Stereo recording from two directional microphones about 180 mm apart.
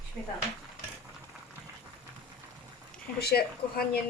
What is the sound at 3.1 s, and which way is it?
Speech, 60° left (ahead or behind).